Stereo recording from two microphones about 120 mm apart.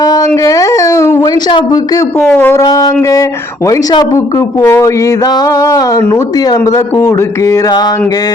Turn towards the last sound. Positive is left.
turn(degrees=25)  # may be behind; listen again after turning